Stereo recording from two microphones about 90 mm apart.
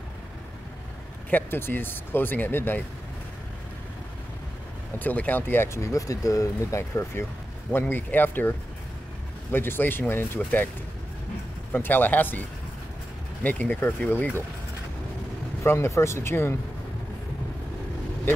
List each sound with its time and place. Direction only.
1.3 s speech: 25° left (ahead or behind)
4.9 s speech: 20° left (ahead or behind)
11.7 s speech: 20° left (ahead or behind)
15.6 s speech: 25° left (ahead or behind)